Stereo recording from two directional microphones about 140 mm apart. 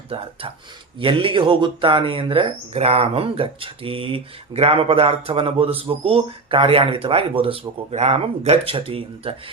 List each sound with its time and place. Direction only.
0.1 s speech: 45° right (ahead or behind)